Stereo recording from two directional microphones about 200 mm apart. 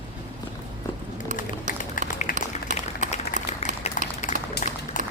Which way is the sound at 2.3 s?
40° right (ahead or behind).